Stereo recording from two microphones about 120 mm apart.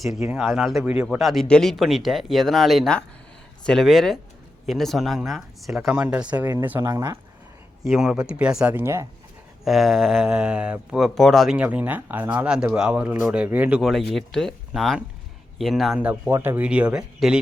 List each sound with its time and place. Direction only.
0.2 s speech: 5° right (ahead or behind); by 7.2 s 25° right (ahead or behind)
7.9 s speech: 5° right (ahead or behind)
8.7 s speech: 20° right (ahead or behind)
9.6 s speech: centre (ahead or behind)
13.9 s speech: 5° left (ahead or behind)
16.0 s speech: 10° right (ahead or behind)